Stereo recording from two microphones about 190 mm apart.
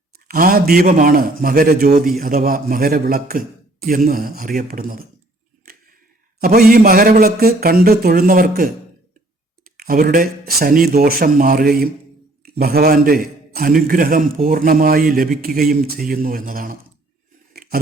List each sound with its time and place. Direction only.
0.3 s a man's voice: 50° right (ahead or behind)
6.4 s a man's voice: 50° right (ahead or behind)